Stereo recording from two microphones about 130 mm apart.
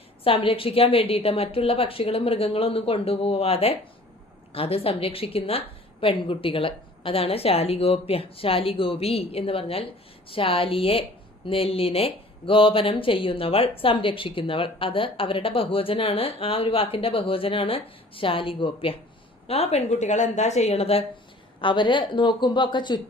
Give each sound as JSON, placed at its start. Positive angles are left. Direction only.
{"t": 0.3, "sound": "a woman's voice", "side_deg": 45}
{"t": 21.6, "sound": "speech", "side_deg": 40}